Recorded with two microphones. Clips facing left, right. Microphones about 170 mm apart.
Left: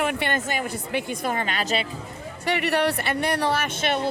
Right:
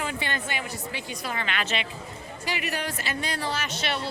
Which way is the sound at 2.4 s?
65° left (ahead or behind).